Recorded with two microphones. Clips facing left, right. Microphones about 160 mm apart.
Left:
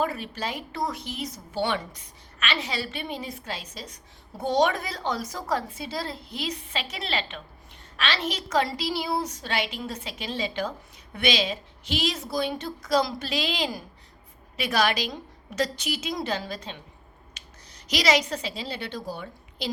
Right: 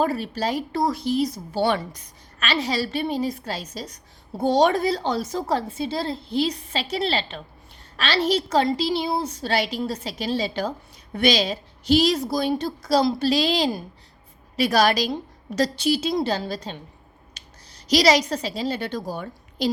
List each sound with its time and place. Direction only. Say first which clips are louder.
0.0 s a woman's voice: right 5 dB; 35° right (ahead or behind)